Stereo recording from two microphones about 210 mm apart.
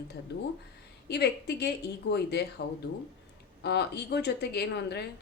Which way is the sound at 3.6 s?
55° left (ahead or behind).